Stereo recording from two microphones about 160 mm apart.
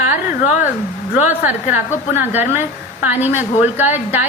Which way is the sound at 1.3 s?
10° right (ahead or behind).